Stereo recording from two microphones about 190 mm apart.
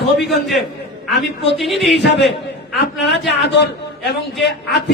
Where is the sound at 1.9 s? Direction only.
65° left (ahead or behind).